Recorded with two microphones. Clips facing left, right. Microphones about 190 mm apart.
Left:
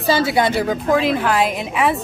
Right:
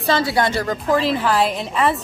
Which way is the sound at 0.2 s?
20° left (ahead or behind).